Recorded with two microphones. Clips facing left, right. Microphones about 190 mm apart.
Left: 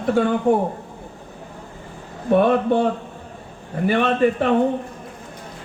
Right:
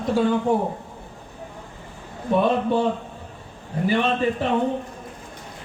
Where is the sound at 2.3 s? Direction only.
60° left (ahead or behind).